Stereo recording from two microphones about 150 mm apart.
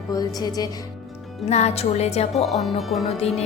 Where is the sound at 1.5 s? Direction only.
45° left (ahead or behind).